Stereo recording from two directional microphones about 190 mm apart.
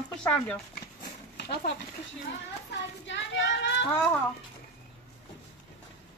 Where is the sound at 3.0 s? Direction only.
70° left (ahead or behind).